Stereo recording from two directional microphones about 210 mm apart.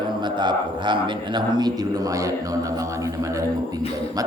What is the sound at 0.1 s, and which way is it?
A man's voice, 20° right (ahead or behind).